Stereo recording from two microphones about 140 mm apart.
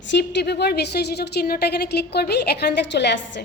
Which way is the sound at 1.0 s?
90° left.